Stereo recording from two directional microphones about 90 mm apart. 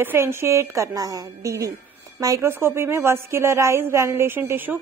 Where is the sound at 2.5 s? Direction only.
25° right (ahead or behind).